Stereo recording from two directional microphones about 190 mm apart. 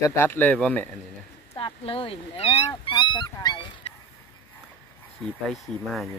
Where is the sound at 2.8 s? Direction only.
25° left (ahead or behind).